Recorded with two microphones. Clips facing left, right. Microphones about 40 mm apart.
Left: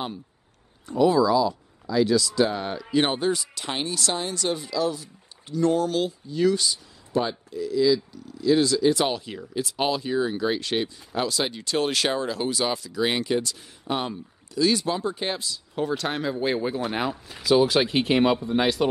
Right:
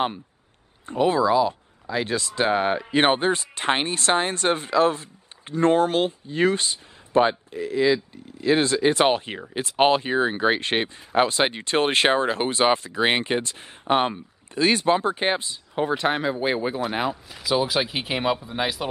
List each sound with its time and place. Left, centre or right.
0.8 s speech: right; by 18.9 s centre